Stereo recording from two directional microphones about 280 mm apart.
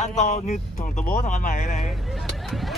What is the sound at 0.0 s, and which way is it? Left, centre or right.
Speech, left.